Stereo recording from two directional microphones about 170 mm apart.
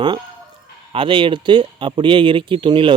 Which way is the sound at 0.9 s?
30° right (ahead or behind).